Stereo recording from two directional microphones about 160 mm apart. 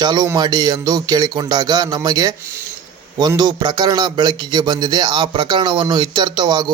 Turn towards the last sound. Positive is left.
turn(degrees=-25)  # may be behind; listen again after turning